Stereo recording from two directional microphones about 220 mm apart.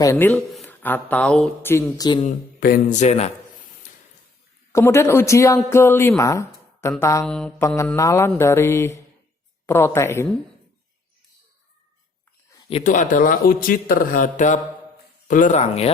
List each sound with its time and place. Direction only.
0.0 s speech: 10° left (ahead or behind)
2.6 s speech: 40° left (ahead or behind)
4.7 s speech: 10° left (ahead or behind)
7.3 s mantra: 5° left (ahead or behind)
7.9 s speech: 15° left (ahead or behind)
12.7 s speech: 35° left (ahead or behind)